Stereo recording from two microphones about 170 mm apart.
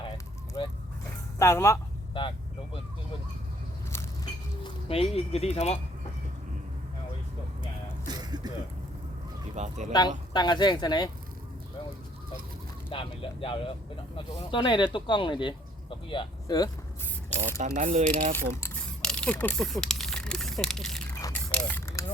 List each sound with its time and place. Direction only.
0.6 s vehicle: 25° left (ahead or behind)
1.4 s speech: 15° left (ahead or behind)
2.2 s speech: 30° left (ahead or behind)
4.6 s speech: 35° left (ahead or behind)
8.0 s a sound: 25° right (ahead or behind)
9.6 s speech: 40° right (ahead or behind)
9.9 s speech: 25° left (ahead or behind)
12.9 s speech: 30° left (ahead or behind)
17.6 s speech: 45° right (ahead or behind)
18.3 s a sound: 10° left (ahead or behind)